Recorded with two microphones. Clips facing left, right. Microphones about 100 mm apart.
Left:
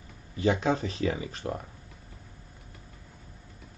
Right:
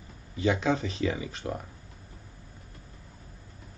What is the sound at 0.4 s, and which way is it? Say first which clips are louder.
Speech: even; 35° left (ahead or behind).